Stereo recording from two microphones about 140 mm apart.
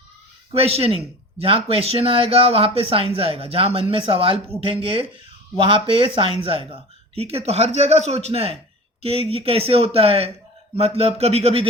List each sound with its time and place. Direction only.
0.5 s speech: 45° right (ahead or behind)